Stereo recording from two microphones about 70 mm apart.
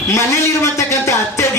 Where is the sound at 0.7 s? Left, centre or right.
Left.